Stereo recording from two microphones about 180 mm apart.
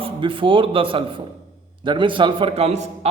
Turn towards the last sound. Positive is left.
turn(degrees=-35)  # may be behind; listen again after turning